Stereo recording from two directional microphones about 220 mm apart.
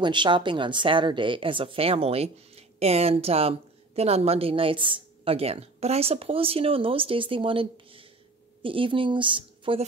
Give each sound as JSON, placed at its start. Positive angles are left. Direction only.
{"t": 0.0, "sound": "a woman's voice", "side_deg": -20}